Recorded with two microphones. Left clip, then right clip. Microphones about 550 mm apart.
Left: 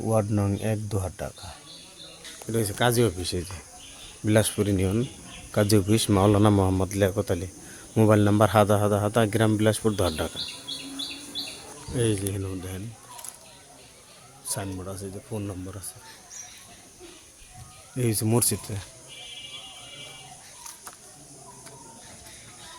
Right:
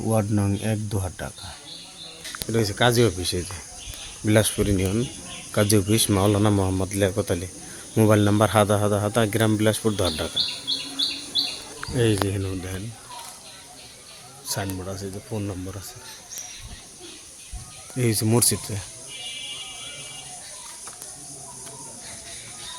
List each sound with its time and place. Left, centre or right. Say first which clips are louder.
0.1 s a man's voice: right 1 dB; left
2.5 s a man's voice: right 3 dB; left
11.9 s a man's voice: right 4 dB; left
14.5 s a man's voice: right 4 dB; left
17.9 s a man's voice: right 3 dB; left